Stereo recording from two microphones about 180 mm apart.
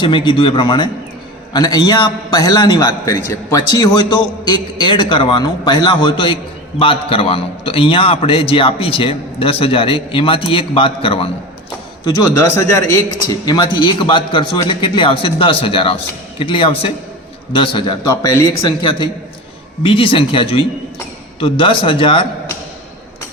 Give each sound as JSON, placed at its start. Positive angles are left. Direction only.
{"t": 0.0, "sound": "a man's voice", "side_deg": 25}
{"t": 12.0, "sound": "a man's voice", "side_deg": 20}
{"t": 18.1, "sound": "a man's voice", "side_deg": 15}